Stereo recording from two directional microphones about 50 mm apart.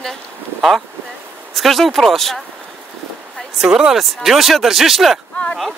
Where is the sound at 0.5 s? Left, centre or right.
Centre.